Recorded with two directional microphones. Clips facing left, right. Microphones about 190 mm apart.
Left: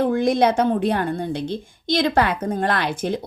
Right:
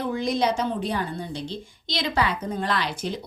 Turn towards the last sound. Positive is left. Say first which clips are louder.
# left 5 dB
turn(degrees=55)  # may be behind; listen again after turning